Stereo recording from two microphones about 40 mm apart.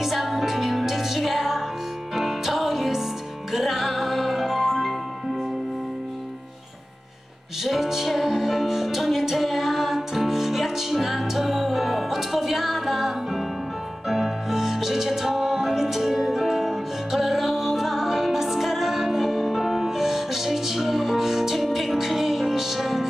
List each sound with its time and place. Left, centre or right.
0.0 s music: centre
7.6 s music: centre